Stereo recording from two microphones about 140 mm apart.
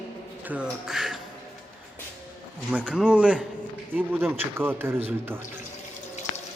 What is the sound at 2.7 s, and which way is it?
A man's voice, 10° right (ahead or behind).